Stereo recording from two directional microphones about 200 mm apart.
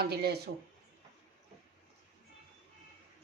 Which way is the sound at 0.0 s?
55° right (ahead or behind).